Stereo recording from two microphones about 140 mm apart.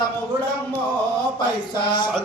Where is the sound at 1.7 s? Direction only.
35° left (ahead or behind).